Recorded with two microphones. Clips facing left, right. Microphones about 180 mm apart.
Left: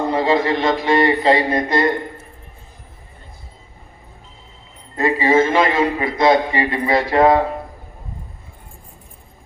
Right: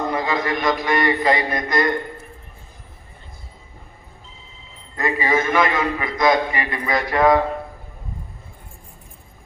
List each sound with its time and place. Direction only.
0.1 s a man's voice: 30° left (ahead or behind)
4.9 s a man's voice: 25° left (ahead or behind)